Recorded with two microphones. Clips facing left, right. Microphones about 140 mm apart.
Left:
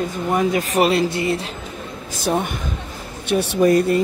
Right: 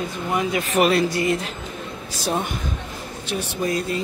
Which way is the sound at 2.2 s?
55° left (ahead or behind).